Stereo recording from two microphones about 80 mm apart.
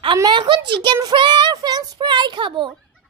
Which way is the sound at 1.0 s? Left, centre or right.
Right.